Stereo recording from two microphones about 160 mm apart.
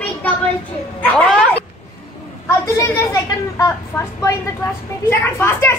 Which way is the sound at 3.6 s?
20° left (ahead or behind).